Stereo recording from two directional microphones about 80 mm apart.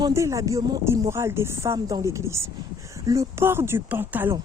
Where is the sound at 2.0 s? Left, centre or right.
Right.